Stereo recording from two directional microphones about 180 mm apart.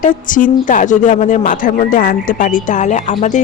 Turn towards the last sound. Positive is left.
turn(degrees=40)  # may be behind; listen again after turning